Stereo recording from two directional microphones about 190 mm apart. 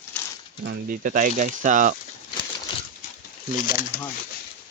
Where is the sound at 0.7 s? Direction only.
50° right (ahead or behind).